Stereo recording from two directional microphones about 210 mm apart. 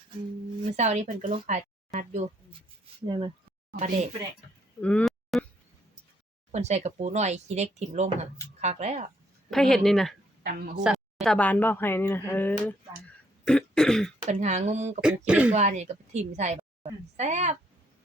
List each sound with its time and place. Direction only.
0.6 s speech: 35° right (ahead or behind)
3.1 s speech: 20° right (ahead or behind)
4.8 s a sound: 5° left (ahead or behind)
6.5 s speech: 30° right (ahead or behind)
9.5 s speech: centre (ahead or behind)
13.4 s throat clearing: 5° left (ahead or behind)
14.3 s speech: 35° right (ahead or behind)
15.3 s speech: 5° right (ahead or behind)
15.5 s a woman's voice: 35° right (ahead or behind)